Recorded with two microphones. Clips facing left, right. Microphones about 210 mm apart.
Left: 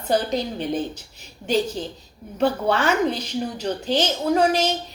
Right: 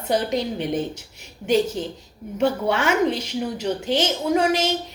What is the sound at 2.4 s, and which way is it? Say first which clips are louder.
A woman's voice: even; 25° right (ahead or behind).